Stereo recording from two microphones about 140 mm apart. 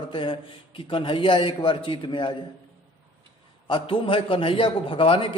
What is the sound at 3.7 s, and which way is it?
A man's voice, 35° left (ahead or behind).